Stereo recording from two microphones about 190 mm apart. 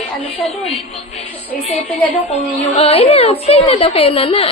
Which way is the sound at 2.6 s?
30° left (ahead or behind).